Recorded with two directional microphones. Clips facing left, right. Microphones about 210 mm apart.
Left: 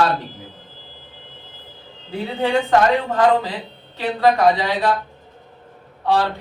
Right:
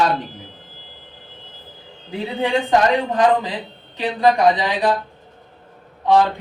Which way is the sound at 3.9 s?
15° right (ahead or behind).